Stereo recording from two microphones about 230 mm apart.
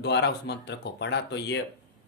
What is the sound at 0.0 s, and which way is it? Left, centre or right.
Speech, left.